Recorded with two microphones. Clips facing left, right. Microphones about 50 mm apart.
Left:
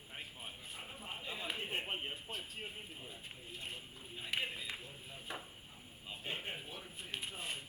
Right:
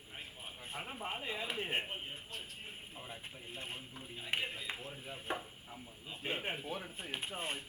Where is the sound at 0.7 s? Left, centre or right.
Right.